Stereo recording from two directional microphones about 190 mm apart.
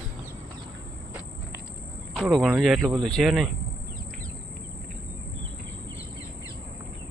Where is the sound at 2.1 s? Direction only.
Centre (ahead or behind).